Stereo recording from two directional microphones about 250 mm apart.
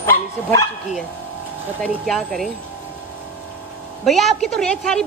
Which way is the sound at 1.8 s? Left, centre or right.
Centre.